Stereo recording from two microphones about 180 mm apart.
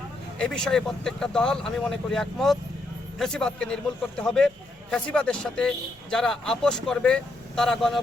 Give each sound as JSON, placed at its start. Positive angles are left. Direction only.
{"t": 0.3, "sound": "speech", "side_deg": 5}